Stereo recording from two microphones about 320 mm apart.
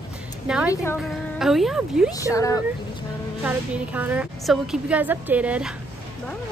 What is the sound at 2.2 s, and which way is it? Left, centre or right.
Speech, centre.